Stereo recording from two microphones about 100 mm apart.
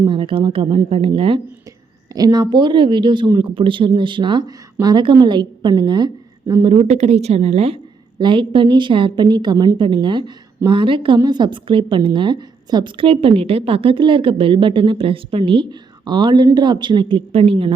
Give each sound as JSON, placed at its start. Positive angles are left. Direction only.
{"t": 0.1, "sound": "a woman's voice", "side_deg": -60}
{"t": 2.1, "sound": "speech", "side_deg": -40}
{"t": 6.6, "sound": "a woman's voice", "side_deg": -65}
{"t": 8.2, "sound": "a woman's voice", "side_deg": -55}
{"t": 11.2, "sound": "a woman's voice", "side_deg": -45}